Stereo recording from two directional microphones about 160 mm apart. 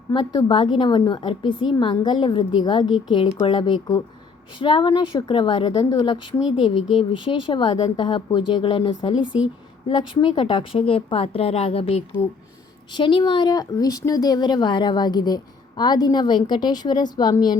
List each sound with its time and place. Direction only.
0.1 s a woman's voice: 30° left (ahead or behind)